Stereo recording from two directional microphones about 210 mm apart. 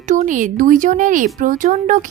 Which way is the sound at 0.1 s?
35° right (ahead or behind).